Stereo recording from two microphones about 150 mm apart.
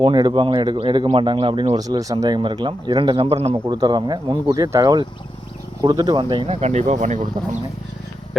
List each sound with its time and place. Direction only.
0.0 s speech: 30° right (ahead or behind); by 7.2 s 55° right (ahead or behind)